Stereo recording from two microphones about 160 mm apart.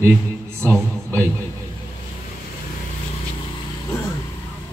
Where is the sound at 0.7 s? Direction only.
10° left (ahead or behind).